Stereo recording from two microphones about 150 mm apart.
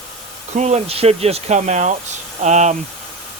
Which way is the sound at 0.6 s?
50° right (ahead or behind).